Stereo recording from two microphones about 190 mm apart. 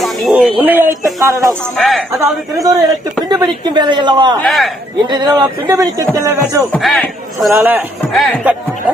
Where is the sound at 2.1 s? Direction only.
20° right (ahead or behind).